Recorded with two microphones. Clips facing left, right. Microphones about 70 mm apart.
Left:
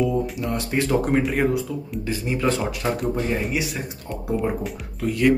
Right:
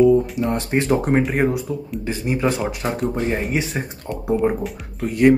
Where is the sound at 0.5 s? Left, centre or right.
Right.